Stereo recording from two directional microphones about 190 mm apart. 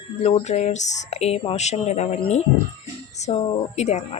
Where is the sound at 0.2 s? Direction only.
30° left (ahead or behind).